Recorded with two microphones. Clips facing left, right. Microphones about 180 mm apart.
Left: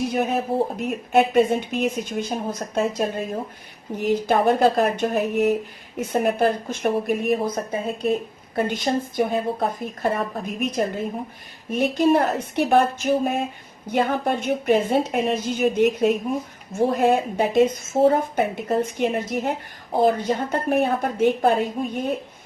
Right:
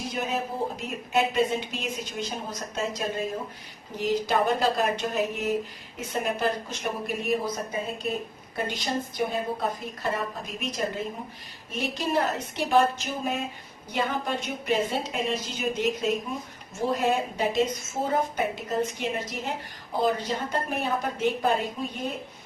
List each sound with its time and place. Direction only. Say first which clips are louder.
0.0 s a woman's voice: left 7 dB; 60° left (ahead or behind)